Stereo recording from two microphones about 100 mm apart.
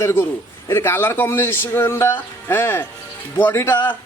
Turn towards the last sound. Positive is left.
turn(degrees=20)  # may be behind; listen again after turning